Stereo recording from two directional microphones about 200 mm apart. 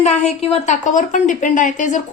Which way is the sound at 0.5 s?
35° left (ahead or behind).